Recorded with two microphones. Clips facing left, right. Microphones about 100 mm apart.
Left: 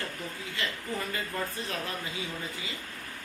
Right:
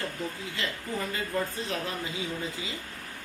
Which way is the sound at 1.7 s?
25° right (ahead or behind).